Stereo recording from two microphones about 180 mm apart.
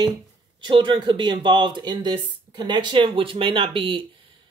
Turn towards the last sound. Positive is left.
turn(degrees=-30)  # may be behind; listen again after turning